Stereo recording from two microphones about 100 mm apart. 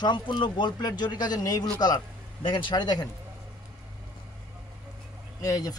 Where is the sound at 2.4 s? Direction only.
60° left (ahead or behind).